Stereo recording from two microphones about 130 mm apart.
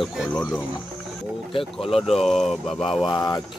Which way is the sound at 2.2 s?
Centre (ahead or behind).